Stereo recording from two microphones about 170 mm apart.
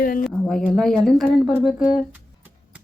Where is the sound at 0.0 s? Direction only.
55° left (ahead or behind).